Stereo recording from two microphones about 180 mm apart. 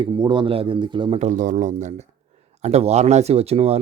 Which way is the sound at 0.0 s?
25° right (ahead or behind).